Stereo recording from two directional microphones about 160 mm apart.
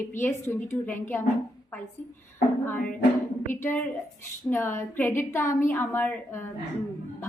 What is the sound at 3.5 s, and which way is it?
A woman's voice, 15° left (ahead or behind).